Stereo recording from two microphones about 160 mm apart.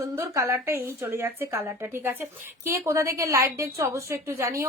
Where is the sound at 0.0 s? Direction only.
20° right (ahead or behind).